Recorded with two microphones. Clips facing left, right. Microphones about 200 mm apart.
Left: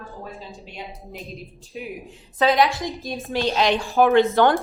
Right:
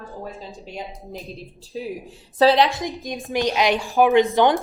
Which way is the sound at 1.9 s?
30° right (ahead or behind).